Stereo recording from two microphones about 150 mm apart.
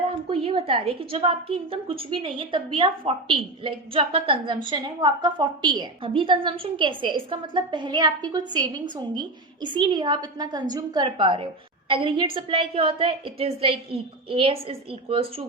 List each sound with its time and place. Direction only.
0.1 s a woman's voice: 40° right (ahead or behind)